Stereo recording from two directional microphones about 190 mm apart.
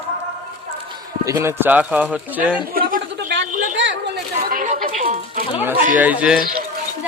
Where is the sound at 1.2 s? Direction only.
15° right (ahead or behind).